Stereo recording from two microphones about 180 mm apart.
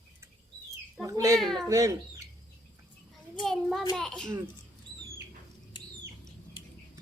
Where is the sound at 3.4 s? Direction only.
Centre (ahead or behind).